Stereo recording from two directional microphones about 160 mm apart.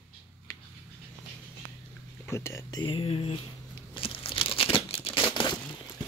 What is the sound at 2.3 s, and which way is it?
Speech, 15° left (ahead or behind).